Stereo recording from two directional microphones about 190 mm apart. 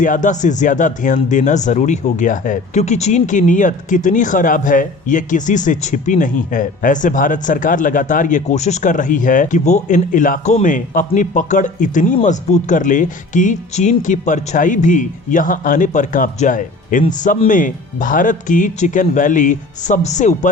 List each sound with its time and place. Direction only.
0.0 s speech: 40° left (ahead or behind)